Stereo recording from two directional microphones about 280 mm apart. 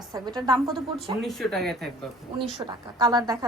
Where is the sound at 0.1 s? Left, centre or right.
Centre.